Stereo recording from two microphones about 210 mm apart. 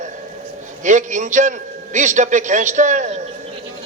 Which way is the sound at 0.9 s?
35° right (ahead or behind).